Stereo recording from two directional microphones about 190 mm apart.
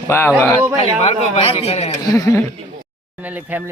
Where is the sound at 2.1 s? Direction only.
15° left (ahead or behind).